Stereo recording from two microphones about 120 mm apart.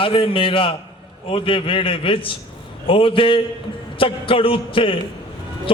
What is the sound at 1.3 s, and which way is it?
A man's voice, 45° left (ahead or behind).